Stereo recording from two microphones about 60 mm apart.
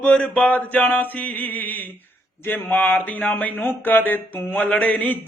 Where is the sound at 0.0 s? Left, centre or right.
Left.